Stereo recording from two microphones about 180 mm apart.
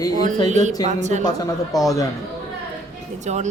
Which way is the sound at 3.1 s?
40° right (ahead or behind).